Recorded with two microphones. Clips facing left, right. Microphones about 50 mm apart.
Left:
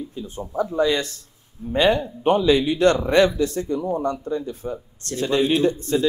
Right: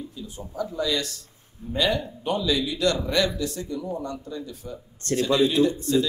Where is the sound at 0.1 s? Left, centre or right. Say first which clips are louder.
Left 7 dB; left.